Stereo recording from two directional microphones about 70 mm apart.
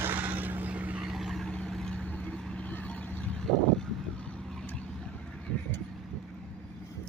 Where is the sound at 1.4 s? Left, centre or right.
Centre.